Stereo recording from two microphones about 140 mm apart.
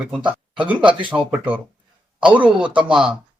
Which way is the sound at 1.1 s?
5° right (ahead or behind).